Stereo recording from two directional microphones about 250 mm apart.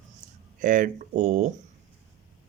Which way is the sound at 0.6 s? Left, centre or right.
Right.